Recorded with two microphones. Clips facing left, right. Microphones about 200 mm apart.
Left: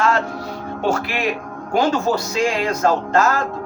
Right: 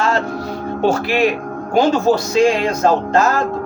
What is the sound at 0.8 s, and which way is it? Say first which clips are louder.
Speech: right 6 dB; 30° right (ahead or behind).